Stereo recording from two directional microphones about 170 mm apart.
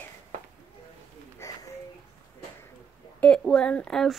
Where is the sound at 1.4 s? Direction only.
20° left (ahead or behind).